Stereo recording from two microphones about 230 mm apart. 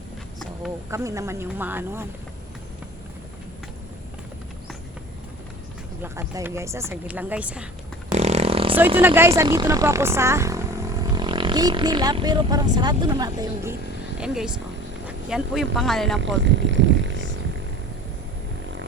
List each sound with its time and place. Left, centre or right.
0.9 s speech: centre
6.0 s speech: centre
8.1 s a sound: right
9.0 s speech: centre
14.2 s speech: centre
15.0 s a sound: centre
15.7 s speech: centre
16.2 s speech: right